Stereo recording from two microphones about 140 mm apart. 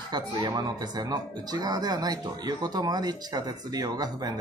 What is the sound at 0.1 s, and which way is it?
Speech, 30° right (ahead or behind).